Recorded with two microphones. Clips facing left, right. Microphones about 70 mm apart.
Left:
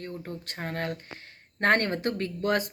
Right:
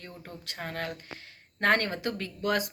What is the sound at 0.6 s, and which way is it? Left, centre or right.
Speech, left.